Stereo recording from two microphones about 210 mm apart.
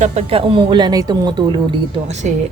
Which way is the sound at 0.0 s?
30° right (ahead or behind).